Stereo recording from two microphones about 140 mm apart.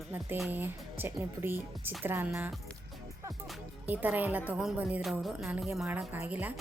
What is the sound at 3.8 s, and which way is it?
A woman's voice, 15° right (ahead or behind).